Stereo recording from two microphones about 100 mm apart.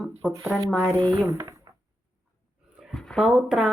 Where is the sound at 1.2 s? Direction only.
30° right (ahead or behind).